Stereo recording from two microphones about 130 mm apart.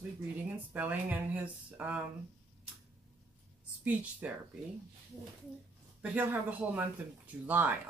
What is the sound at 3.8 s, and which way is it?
Speech, 10° right (ahead or behind).